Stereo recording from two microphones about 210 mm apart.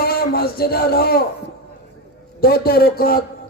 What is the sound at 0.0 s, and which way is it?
A man's voice, 45° left (ahead or behind).